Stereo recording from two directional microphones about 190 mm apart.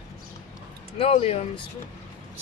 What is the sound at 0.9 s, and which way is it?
Speech, 30° left (ahead or behind).